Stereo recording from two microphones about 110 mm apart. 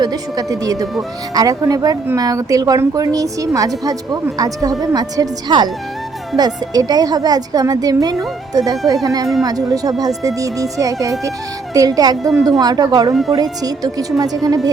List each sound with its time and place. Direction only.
0.0 s a woman's voice: 35° right (ahead or behind)